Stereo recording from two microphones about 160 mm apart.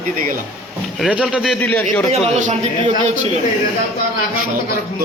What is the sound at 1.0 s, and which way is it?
Speech, 5° right (ahead or behind).